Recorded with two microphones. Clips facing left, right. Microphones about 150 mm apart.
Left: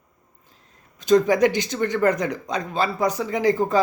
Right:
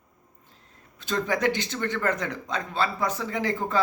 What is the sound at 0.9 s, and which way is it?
Speech, 15° left (ahead or behind).